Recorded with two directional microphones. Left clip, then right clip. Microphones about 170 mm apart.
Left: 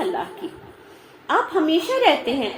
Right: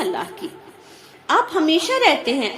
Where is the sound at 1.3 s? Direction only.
35° right (ahead or behind).